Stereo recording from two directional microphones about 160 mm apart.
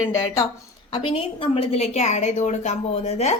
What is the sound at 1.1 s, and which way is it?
A woman's voice, 40° left (ahead or behind).